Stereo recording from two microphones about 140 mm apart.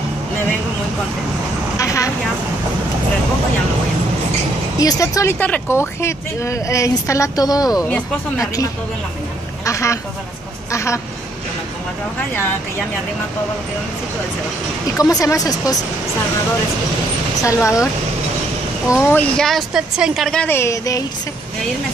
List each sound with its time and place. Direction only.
1.8 s vehicle: 25° left (ahead or behind)
4.7 s speech: 25° left (ahead or behind)
9.7 s speech: 20° left (ahead or behind)
15.0 s speech: 25° left (ahead or behind)
17.4 s speech: 20° left (ahead or behind)
19.0 s speech: 10° left (ahead or behind)
20.4 s speech: 20° left (ahead or behind)